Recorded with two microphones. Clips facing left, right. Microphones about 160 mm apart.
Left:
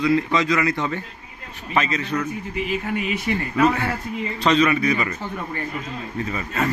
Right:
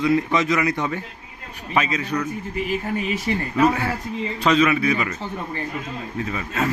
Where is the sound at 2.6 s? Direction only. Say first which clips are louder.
Even; 40° right (ahead or behind).